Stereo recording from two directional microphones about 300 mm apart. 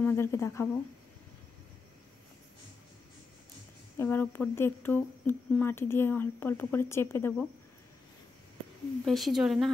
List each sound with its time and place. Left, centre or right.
0.0 s speech: centre
4.0 s speech: centre
9.0 s a woman's voice: centre